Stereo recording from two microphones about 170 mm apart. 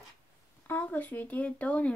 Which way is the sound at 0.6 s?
10° left (ahead or behind).